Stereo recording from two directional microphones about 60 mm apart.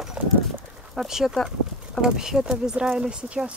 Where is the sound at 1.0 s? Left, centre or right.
Centre.